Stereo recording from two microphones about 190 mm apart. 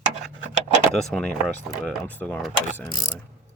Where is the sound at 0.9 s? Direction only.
5° left (ahead or behind).